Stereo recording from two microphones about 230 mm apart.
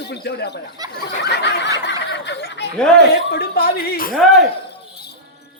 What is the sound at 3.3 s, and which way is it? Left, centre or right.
Speech, left.